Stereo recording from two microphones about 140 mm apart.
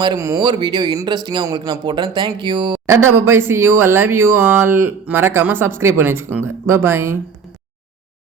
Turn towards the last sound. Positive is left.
turn(degrees=-15)  # may be behind; listen again after turning